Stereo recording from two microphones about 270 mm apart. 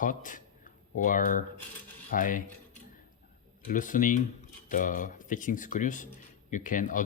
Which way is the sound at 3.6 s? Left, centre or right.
Left.